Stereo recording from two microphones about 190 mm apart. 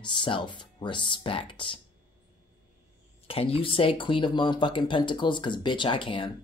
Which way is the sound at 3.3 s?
30° left (ahead or behind).